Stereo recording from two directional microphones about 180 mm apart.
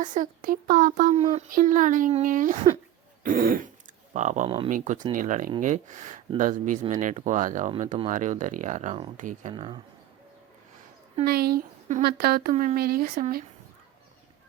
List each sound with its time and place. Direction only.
0.0 s speech: 45° right (ahead or behind)
4.4 s speech: 30° right (ahead or behind)
4.7 s speech: 45° right (ahead or behind)
9.5 s speech: 30° right (ahead or behind)
11.3 s speech: 60° right (ahead or behind)